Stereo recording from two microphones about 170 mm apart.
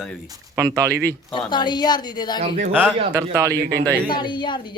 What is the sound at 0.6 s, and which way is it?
Speech, 20° right (ahead or behind).